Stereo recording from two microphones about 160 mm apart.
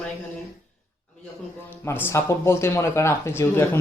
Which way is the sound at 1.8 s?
15° left (ahead or behind).